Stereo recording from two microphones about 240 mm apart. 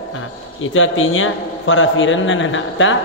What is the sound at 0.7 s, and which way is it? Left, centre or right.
A man's voice, left.